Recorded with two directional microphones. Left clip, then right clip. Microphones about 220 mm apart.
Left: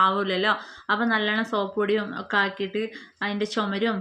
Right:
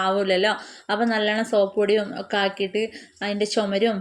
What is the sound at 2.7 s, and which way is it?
A woman's voice, 5° right (ahead or behind).